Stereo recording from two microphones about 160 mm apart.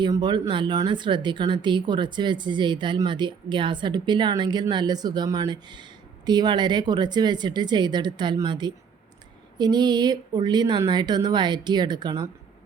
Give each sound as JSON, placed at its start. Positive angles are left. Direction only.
{"t": 0.0, "sound": "speech", "side_deg": -30}